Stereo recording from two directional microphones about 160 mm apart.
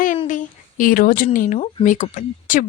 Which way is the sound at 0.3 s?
55° left (ahead or behind).